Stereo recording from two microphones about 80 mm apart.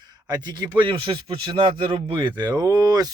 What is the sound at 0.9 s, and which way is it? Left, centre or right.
Speech, right.